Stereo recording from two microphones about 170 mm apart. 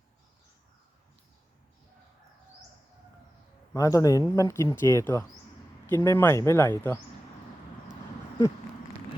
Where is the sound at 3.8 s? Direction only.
20° left (ahead or behind).